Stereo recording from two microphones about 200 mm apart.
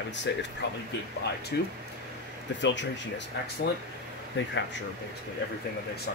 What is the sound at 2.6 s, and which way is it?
Speech, 65° left (ahead or behind).